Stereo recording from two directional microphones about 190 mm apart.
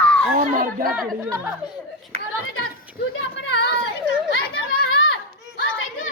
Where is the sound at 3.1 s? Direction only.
70° left (ahead or behind).